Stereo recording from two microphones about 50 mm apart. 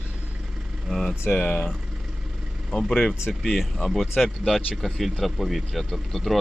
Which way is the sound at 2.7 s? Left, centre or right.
Left.